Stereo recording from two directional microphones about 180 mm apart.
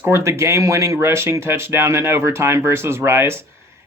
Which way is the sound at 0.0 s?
15° right (ahead or behind).